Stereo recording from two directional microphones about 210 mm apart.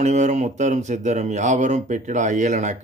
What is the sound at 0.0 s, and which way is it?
Speech, 35° right (ahead or behind).